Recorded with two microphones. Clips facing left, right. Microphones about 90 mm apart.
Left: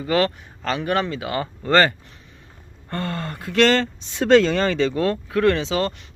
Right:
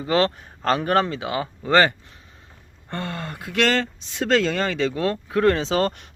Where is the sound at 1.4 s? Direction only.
10° right (ahead or behind).